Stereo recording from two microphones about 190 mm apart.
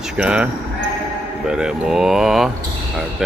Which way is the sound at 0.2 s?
5° right (ahead or behind).